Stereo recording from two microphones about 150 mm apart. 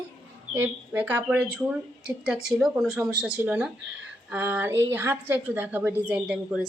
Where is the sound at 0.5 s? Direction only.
10° right (ahead or behind).